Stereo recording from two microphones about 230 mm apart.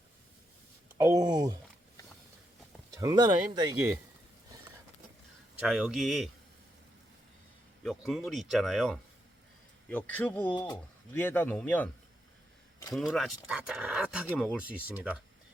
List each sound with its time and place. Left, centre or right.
0.9 s speech: centre
2.9 s speech: centre
5.6 s speech: centre
7.9 s a man's voice: centre
10.5 s a man's voice: centre
12.9 s speech: centre